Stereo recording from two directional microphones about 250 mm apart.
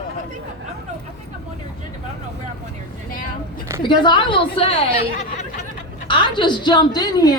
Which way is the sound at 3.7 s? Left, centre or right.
Centre.